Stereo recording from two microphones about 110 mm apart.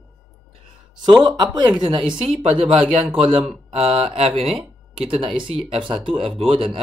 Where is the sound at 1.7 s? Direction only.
50° right (ahead or behind).